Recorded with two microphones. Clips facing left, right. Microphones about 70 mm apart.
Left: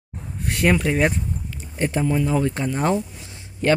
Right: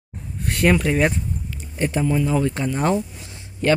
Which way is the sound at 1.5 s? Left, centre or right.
Left.